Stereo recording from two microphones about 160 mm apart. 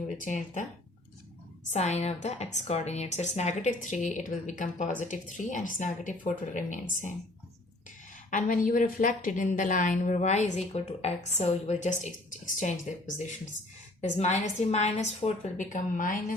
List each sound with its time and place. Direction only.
0.2 s a woman's voice: 50° left (ahead or behind)
1.7 s a woman's voice: 45° left (ahead or behind)
8.3 s a woman's voice: 55° left (ahead or behind)